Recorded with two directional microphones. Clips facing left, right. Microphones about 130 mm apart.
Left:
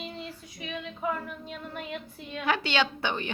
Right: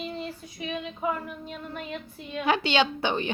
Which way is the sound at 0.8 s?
10° right (ahead or behind).